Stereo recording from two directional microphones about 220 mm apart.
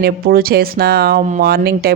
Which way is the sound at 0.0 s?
40° right (ahead or behind).